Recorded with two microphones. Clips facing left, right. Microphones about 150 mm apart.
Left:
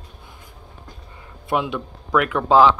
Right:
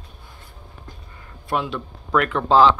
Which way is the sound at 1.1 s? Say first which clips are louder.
Left 2 dB; 20° left (ahead or behind).